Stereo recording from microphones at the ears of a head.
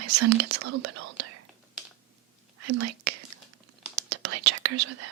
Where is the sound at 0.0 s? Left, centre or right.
Right.